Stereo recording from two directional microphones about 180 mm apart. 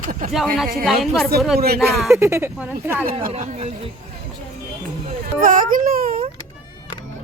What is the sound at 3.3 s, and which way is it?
Speech, 40° right (ahead or behind).